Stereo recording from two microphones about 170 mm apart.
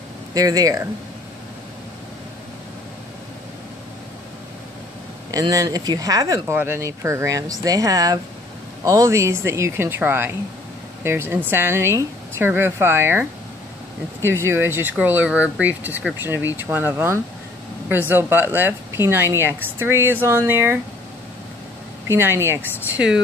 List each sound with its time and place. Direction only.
0.3 s speech: 20° right (ahead or behind)
5.3 s speech: 20° right (ahead or behind)
22.1 s speech: 15° right (ahead or behind)